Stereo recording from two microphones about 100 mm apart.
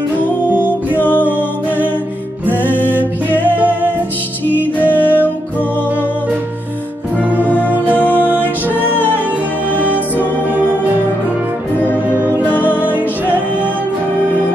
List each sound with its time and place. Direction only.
0.5 s music: 15° right (ahead or behind)
0.9 s music: 15° left (ahead or behind)
3.0 s music: 15° right (ahead or behind)
4.7 s music: 15° left (ahead or behind)
7.5 s music: 15° right (ahead or behind)
8.8 s music: 20° left (ahead or behind)